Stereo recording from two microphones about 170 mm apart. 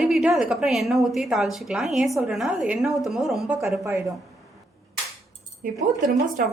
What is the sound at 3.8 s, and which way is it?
Speech, 15° right (ahead or behind).